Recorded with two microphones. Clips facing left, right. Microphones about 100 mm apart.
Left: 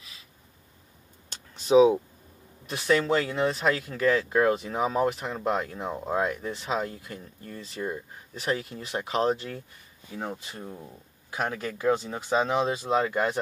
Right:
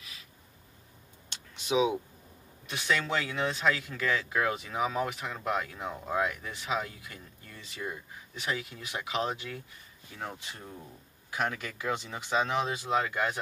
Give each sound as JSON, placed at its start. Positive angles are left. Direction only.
{"t": 1.3, "sound": "a sound", "side_deg": 40}
{"t": 2.6, "sound": "speech", "side_deg": 35}
{"t": 11.3, "sound": "speech", "side_deg": 35}